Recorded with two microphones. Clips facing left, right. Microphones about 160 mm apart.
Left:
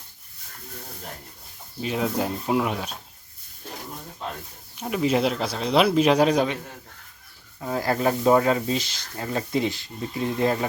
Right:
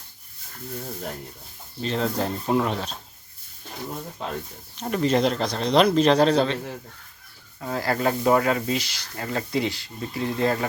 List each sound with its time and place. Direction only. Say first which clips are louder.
1.8 s speech: even; 10° left (ahead or behind)
4.8 s speech: right 1 dB; 5° left (ahead or behind)
7.6 s speech: left 1 dB; 15° left (ahead or behind)